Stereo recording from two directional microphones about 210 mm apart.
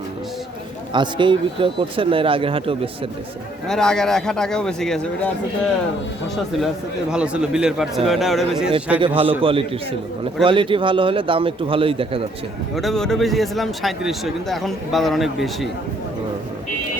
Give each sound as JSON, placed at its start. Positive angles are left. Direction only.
{"t": 0.9, "sound": "speech", "side_deg": -20}
{"t": 3.7, "sound": "speech", "side_deg": 5}
{"t": 7.1, "sound": "speech", "side_deg": -5}
{"t": 9.0, "sound": "speech", "side_deg": -25}
{"t": 12.7, "sound": "speech", "side_deg": 0}